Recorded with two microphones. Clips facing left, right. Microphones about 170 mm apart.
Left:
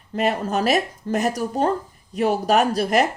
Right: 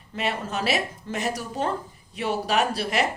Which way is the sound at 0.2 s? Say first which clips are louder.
Left 7 dB; 40° left (ahead or behind).